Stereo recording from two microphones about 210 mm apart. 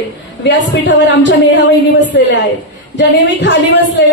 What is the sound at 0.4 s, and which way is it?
A woman's voice, 60° left (ahead or behind).